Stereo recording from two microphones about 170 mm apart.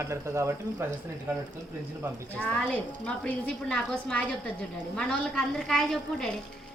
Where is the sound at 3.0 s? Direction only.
5° left (ahead or behind).